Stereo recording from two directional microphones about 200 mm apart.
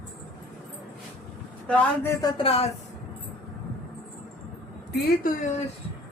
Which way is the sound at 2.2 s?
20° left (ahead or behind).